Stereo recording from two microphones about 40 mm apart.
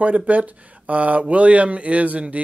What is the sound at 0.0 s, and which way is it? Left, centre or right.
Speech, right.